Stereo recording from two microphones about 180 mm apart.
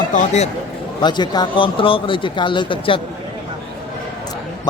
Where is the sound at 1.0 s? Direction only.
25° left (ahead or behind).